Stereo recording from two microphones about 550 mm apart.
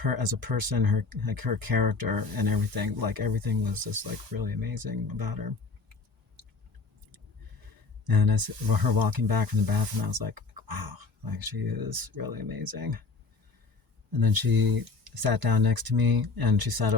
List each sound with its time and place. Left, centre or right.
0.0 s speech: right
7.1 s speech: right
14.2 s speech: right